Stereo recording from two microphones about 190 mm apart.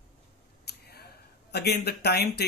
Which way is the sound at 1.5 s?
60° left (ahead or behind).